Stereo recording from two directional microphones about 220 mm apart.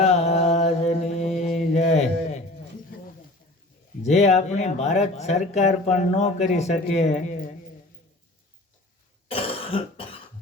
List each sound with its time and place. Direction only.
0.0 s mantra: 30° left (ahead or behind)
1.7 s a sound: 30° left (ahead or behind)
4.0 s speech: 30° left (ahead or behind)
9.3 s cough: 25° left (ahead or behind)